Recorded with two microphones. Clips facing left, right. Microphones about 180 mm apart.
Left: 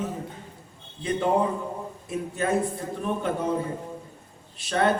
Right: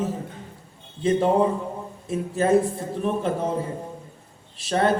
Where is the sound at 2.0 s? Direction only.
30° right (ahead or behind).